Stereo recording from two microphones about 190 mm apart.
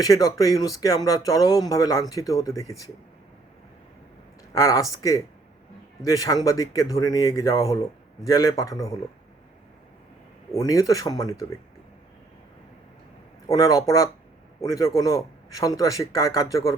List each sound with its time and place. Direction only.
0.0 s speech: 20° left (ahead or behind)
4.5 s speech: 15° left (ahead or behind)
10.5 s speech: 15° left (ahead or behind)
13.5 s speech: 20° left (ahead or behind)